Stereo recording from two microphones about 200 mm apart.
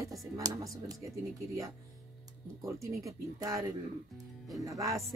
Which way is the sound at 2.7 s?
15° right (ahead or behind).